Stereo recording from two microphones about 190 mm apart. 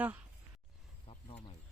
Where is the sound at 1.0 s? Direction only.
30° left (ahead or behind).